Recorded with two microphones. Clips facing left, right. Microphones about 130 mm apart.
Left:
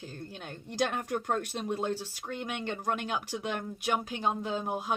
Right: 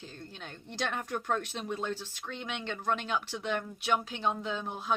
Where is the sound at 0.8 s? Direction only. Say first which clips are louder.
Left 4 dB; 45° left (ahead or behind).